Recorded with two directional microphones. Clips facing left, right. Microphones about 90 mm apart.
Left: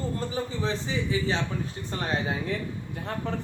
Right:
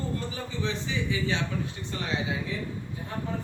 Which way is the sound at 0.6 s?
35° left (ahead or behind).